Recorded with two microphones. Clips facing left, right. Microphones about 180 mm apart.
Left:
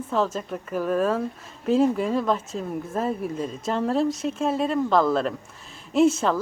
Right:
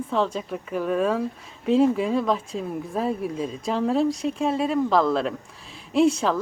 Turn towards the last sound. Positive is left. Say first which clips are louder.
# even
turn(degrees=0)  # may be behind; listen again after turning